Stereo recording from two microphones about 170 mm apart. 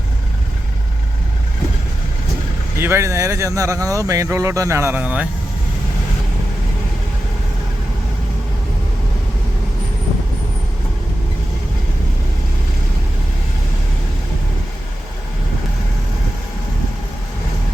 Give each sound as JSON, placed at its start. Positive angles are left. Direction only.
{"t": 2.7, "sound": "speech", "side_deg": -15}